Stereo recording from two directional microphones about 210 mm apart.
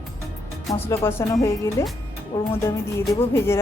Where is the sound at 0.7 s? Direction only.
10° left (ahead or behind).